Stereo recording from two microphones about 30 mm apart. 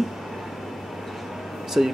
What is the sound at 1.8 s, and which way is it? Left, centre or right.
Speech, right.